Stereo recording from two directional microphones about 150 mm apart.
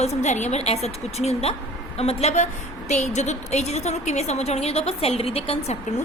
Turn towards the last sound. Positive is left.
turn(degrees=45)  # may be behind; listen again after turning